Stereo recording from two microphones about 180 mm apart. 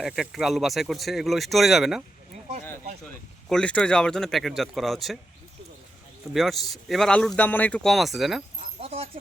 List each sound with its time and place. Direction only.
0.0 s speech: centre (ahead or behind)
3.5 s speech: 5° left (ahead or behind)
6.3 s speech: centre (ahead or behind)
8.8 s speech: 35° right (ahead or behind)